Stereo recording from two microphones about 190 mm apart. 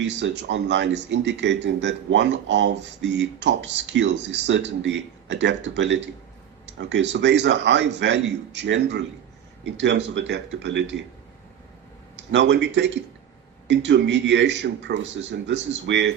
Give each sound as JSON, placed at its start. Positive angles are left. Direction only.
{"t": 0.0, "sound": "speech", "side_deg": -70}
{"t": 12.3, "sound": "a man's voice", "side_deg": -65}